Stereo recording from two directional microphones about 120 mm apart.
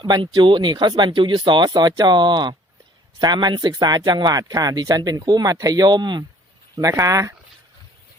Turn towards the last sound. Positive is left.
turn(degrees=-25)  # may be behind; listen again after turning